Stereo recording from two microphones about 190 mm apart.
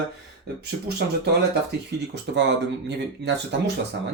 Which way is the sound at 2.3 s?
65° right (ahead or behind).